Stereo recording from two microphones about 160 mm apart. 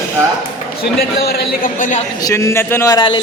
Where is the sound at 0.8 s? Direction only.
75° left (ahead or behind).